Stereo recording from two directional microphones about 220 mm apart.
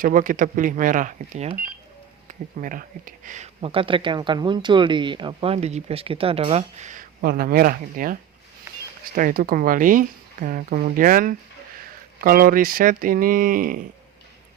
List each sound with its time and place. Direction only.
0.0 s speech: 40° right (ahead or behind)
8.7 s a sound: 10° right (ahead or behind)
9.1 s speech: 40° right (ahead or behind)